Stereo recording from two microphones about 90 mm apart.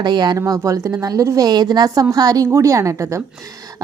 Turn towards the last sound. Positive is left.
turn(degrees=-35)  # may be behind; listen again after turning